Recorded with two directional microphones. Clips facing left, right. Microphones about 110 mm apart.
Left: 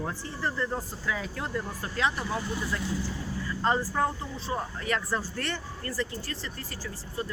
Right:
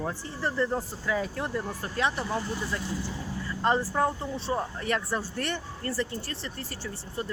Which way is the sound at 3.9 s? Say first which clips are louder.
Right 2 dB; 30° right (ahead or behind).